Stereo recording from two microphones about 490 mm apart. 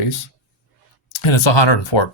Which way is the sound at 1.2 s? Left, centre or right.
Left.